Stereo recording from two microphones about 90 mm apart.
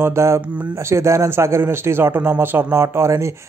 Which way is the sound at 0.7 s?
30° right (ahead or behind).